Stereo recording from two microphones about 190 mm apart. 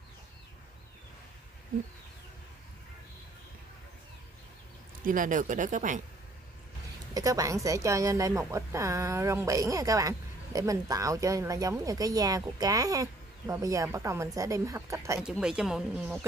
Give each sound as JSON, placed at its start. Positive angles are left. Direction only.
{"t": 5.0, "sound": "speech", "side_deg": -45}
{"t": 7.2, "sound": "a woman's voice", "side_deg": -15}
{"t": 15.2, "sound": "speech", "side_deg": -5}